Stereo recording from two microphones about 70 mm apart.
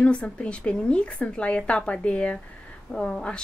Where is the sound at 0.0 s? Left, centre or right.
Centre.